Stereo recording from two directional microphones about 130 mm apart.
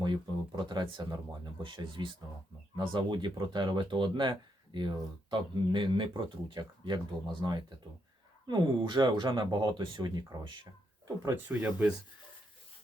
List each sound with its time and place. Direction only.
0.0 s speech: 35° right (ahead or behind)
11.2 s speech: 15° right (ahead or behind)